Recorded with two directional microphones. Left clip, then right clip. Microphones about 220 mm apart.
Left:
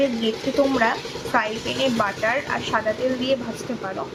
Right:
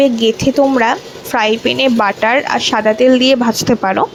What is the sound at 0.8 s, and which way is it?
Speech, 35° right (ahead or behind).